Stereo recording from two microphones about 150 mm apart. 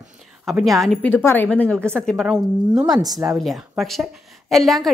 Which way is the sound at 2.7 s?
25° right (ahead or behind).